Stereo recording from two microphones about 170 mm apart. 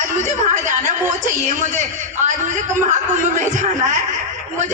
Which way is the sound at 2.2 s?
45° right (ahead or behind).